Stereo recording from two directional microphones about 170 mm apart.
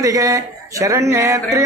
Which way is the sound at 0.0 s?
20° right (ahead or behind).